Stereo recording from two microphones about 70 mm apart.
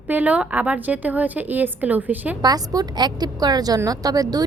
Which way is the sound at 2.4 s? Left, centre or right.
Right.